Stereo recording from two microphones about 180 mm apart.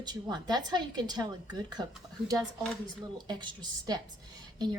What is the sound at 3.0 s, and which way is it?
Speech, 25° right (ahead or behind).